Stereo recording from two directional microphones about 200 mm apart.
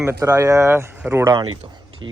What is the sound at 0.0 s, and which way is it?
Speech, 15° right (ahead or behind).